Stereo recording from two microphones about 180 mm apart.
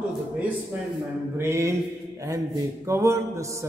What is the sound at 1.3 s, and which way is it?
Speech, 15° right (ahead or behind).